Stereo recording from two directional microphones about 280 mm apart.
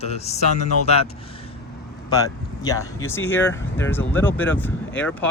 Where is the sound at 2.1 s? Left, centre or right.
Centre.